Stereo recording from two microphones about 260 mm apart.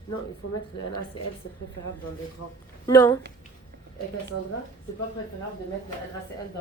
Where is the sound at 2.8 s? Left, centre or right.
Centre.